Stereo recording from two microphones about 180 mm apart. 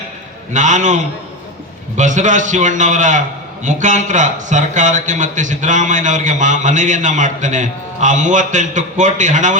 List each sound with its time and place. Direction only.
0.5 s a man's voice: 45° right (ahead or behind)